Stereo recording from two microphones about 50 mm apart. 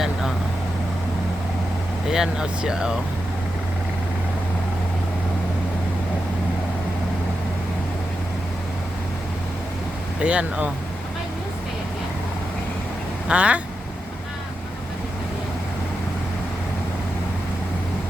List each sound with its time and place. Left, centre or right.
2.0 s speech: centre
10.2 s speech: right
13.2 s speech: right